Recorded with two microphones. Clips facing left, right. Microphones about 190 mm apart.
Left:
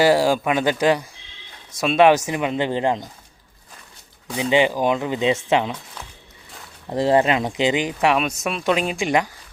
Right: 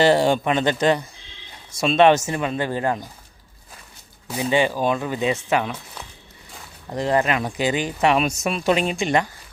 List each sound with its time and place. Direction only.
0.0 s speech: 5° left (ahead or behind)
4.4 s speech: 20° left (ahead or behind)
6.9 s speech: 30° left (ahead or behind)
8.0 s speech: centre (ahead or behind)
9.0 s speech: 10° left (ahead or behind)